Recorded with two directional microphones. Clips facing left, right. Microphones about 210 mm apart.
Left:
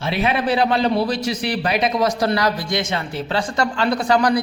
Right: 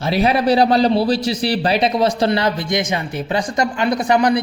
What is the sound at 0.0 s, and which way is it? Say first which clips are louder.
A man's voice: right 4 dB; 40° right (ahead or behind).